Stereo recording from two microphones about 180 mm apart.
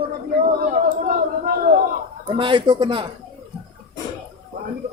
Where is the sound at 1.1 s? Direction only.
50° right (ahead or behind).